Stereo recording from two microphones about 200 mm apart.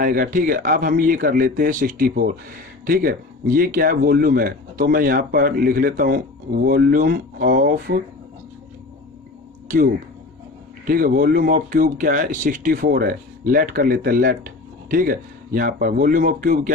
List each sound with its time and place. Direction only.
0.0 s speech: 45° right (ahead or behind)
10.8 s speech: 45° right (ahead or behind)